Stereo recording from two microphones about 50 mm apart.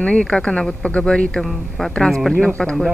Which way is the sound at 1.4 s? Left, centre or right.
Centre.